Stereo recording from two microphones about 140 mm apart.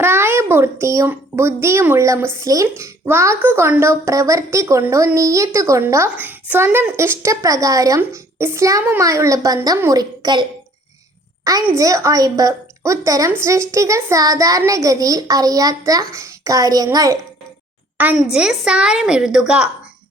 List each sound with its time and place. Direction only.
0.0 s a child's voice: 15° right (ahead or behind)
11.6 s a child's voice: 20° right (ahead or behind)
17.9 s a sound: 10° right (ahead or behind)
18.2 s a woman's voice: 5° right (ahead or behind)